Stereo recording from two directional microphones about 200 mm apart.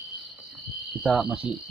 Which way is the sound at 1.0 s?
5° right (ahead or behind).